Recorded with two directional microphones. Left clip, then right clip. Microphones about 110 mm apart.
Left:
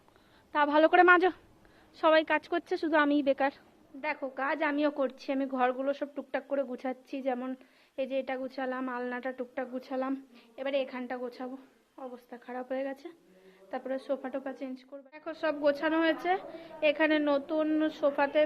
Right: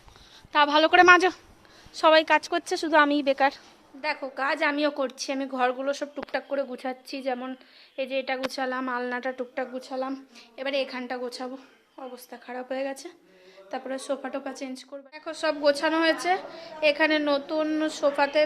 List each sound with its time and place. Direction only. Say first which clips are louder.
0.5 s a woman's voice: right 4 dB; 10° right (ahead or behind)
0.9 s a woman's voice: right 7 dB; 25° right (ahead or behind); by 8.4 s 5° right (ahead or behind)
8.4 s a woman's voice: right 6 dB; 25° right (ahead or behind)
9.7 s a woman's voice: right 3 dB; 5° left (ahead or behind)
10.5 s a woman's voice: right 4 dB; 15° right (ahead or behind)